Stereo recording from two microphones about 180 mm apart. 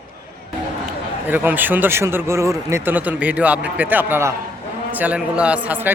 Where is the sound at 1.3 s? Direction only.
10° right (ahead or behind).